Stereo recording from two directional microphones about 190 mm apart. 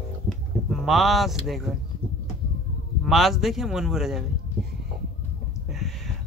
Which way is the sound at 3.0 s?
Centre (ahead or behind).